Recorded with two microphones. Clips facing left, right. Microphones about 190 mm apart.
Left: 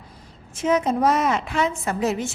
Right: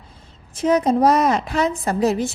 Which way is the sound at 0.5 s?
35° right (ahead or behind).